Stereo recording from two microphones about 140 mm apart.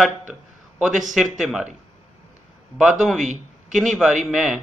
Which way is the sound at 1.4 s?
5° right (ahead or behind).